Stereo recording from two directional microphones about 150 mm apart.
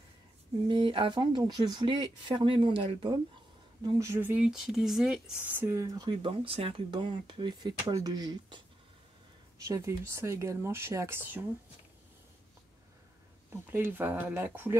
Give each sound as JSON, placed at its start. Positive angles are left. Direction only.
{"t": 0.7, "sound": "speech", "side_deg": -35}
{"t": 3.8, "sound": "speech", "side_deg": -20}
{"t": 9.6, "sound": "speech", "side_deg": -20}
{"t": 13.5, "sound": "speech", "side_deg": -15}